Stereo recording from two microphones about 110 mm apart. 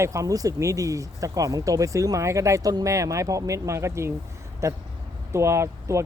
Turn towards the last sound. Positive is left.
turn(degrees=-25)  # may be behind; listen again after turning